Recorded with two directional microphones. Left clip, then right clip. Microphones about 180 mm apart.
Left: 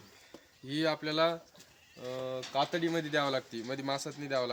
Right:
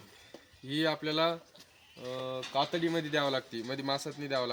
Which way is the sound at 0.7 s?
5° right (ahead or behind).